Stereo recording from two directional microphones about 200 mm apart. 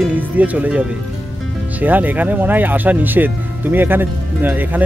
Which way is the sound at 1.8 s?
10° right (ahead or behind).